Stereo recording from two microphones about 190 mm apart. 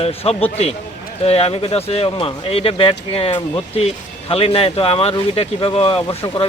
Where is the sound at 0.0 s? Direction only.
30° left (ahead or behind).